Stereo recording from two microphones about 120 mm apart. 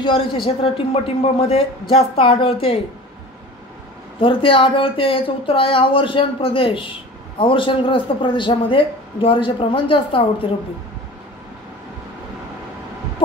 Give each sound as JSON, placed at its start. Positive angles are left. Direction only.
{"t": 0.0, "sound": "a man's voice", "side_deg": 45}
{"t": 1.0, "sound": "speech", "side_deg": 55}
{"t": 4.2, "sound": "a man's voice", "side_deg": 50}